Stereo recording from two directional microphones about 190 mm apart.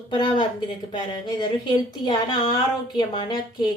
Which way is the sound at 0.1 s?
25° left (ahead or behind).